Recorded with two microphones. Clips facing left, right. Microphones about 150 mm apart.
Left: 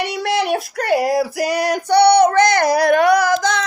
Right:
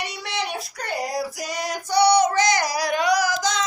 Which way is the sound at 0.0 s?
60° left (ahead or behind).